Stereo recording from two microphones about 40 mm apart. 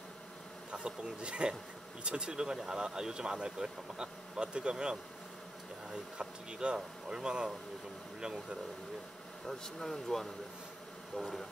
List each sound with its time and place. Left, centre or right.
0.7 s speech: right
9.5 s speech: centre